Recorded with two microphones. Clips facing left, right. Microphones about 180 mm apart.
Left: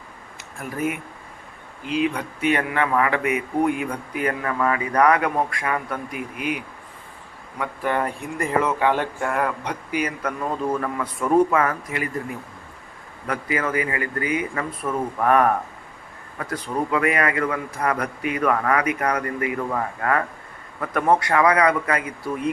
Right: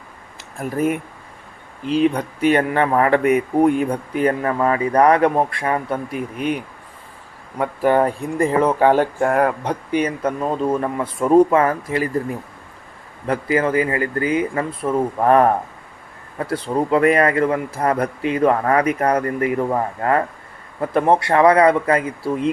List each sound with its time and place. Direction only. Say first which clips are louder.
0.6 s speech: right 6 dB; 35° right (ahead or behind)
7.6 s speech: right 8 dB; 40° right (ahead or behind)
9.9 s speech: right 6 dB; 30° right (ahead or behind)